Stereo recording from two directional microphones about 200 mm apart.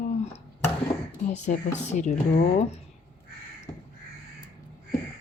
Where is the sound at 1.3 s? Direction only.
35° left (ahead or behind).